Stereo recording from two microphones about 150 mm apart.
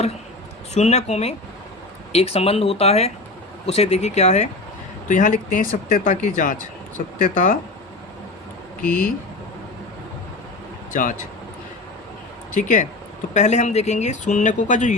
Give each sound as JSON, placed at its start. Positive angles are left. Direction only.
{"t": 0.7, "sound": "speech", "side_deg": 45}
{"t": 5.0, "sound": "speech", "side_deg": 60}
{"t": 10.9, "sound": "speech", "side_deg": 60}
{"t": 12.5, "sound": "speech", "side_deg": 60}